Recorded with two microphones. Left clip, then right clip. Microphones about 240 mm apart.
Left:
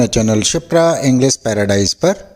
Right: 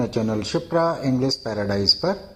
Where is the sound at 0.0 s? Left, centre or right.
Left.